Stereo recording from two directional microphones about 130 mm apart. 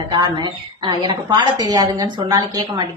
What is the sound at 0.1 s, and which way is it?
A woman's voice, 35° right (ahead or behind).